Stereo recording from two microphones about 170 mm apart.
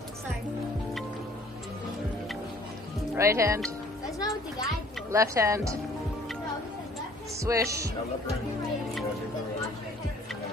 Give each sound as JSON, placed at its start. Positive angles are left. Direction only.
{"t": 3.2, "sound": "speech", "side_deg": -15}
{"t": 4.0, "sound": "music", "side_deg": 20}
{"t": 5.1, "sound": "speech", "side_deg": -15}
{"t": 7.3, "sound": "speech", "side_deg": -20}